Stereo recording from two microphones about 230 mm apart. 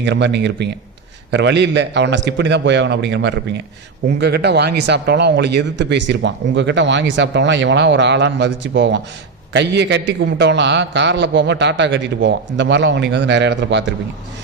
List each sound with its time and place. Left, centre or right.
0.0 s speech: right